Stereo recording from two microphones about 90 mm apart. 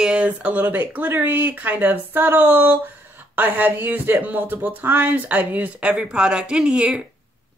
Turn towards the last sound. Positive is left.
turn(degrees=-10)  # may be behind; listen again after turning